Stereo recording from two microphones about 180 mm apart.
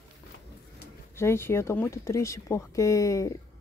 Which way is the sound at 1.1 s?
15° left (ahead or behind).